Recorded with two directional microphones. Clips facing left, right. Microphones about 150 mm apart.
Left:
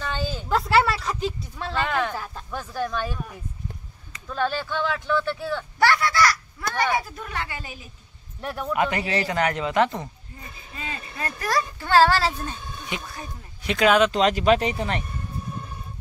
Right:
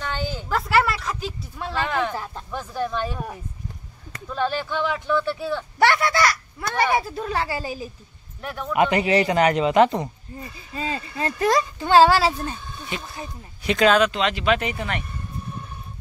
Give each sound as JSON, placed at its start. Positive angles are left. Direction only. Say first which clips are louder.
{"t": 0.5, "sound": "a sound", "louder": "left 1 dB", "side_deg": 0}
{"t": 1.6, "sound": "speech", "louder": "right 1 dB", "side_deg": -10}
{"t": 4.4, "sound": "speech", "louder": "right 1 dB", "side_deg": -15}
{"t": 4.9, "sound": "speech", "louder": "right 2 dB", "side_deg": 0}
{"t": 5.8, "sound": "speech", "louder": "right 1 dB", "side_deg": -25}
{"t": 8.5, "sound": "speech", "louder": "left 1 dB", "side_deg": 5}
{"t": 8.7, "sound": "speech", "louder": "right 6 dB", "side_deg": -20}
{"t": 10.7, "sound": "speech", "louder": "right 7 dB", "side_deg": -30}
{"t": 13.7, "sound": "speech", "louder": "right 2 dB", "side_deg": 5}
{"t": 14.1, "sound": "speech", "louder": "left 3 dB", "side_deg": 40}